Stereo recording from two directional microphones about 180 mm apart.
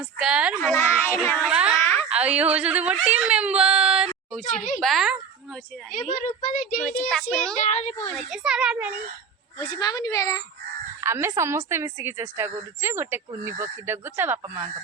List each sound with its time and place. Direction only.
0.2 s a child's voice: 5° right (ahead or behind)
0.8 s child singing: 10° left (ahead or behind)
1.3 s a sound: 5° left (ahead or behind)
1.5 s a sound: 5° right (ahead or behind)
1.8 s a sound: 10° left (ahead or behind)
2.0 s a woman's voice: 5° right (ahead or behind)
5.9 s speech: 45° left (ahead or behind)
7.1 s a child's voice: 5° left (ahead or behind)
7.6 s speech: 40° left (ahead or behind)
8.1 s a child's voice: 5° right (ahead or behind)
9.6 s a woman's voice: 25° left (ahead or behind)
11.0 s a woman's voice: 15° right (ahead or behind)